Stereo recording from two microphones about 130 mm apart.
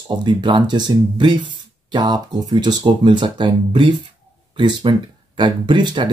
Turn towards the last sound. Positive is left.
turn(degrees=-35)  # may be behind; listen again after turning